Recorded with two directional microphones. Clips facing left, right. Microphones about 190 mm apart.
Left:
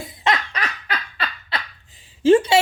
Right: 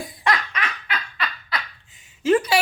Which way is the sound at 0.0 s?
25° left (ahead or behind).